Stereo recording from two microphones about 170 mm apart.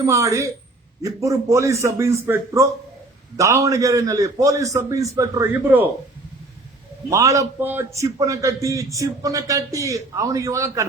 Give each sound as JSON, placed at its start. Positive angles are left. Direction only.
{"t": 0.0, "sound": "a man's voice", "side_deg": -20}
{"t": 7.1, "sound": "a man's voice", "side_deg": -20}